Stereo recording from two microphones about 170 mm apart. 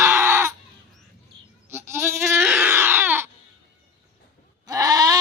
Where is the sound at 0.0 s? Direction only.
15° right (ahead or behind).